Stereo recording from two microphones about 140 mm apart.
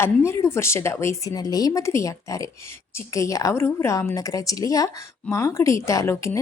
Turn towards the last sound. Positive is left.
turn(degrees=20)  # may be behind; listen again after turning